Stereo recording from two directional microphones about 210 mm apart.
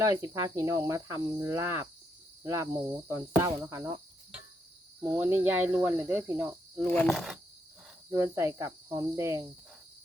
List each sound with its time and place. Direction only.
0.0 s speech: 15° right (ahead or behind)
2.4 s cricket: 15° right (ahead or behind)
3.1 s speech: 15° right (ahead or behind)
4.9 s speech: 10° right (ahead or behind)
6.9 s speech: 5° left (ahead or behind)
8.1 s speech: 10° right (ahead or behind)